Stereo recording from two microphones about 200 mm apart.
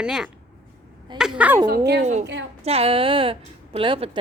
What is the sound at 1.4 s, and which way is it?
Speech, 10° right (ahead or behind).